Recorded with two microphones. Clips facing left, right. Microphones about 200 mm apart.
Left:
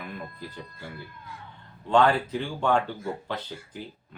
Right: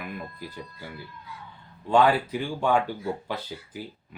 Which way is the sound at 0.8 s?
50° left (ahead or behind).